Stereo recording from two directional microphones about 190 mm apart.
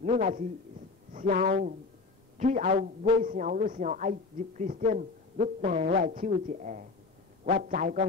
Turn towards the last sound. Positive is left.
turn(degrees=-45)  # may be behind; listen again after turning